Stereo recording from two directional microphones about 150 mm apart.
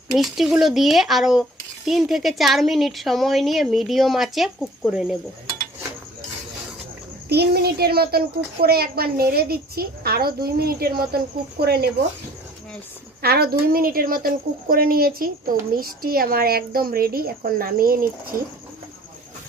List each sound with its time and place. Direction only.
0.1 s speech: centre (ahead or behind)
7.3 s a woman's voice: 90° right
13.2 s speech: 90° right; by 18.3 s 75° right (ahead or behind)